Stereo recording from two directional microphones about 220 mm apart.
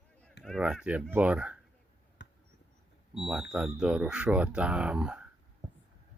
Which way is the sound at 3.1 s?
Centre (ahead or behind).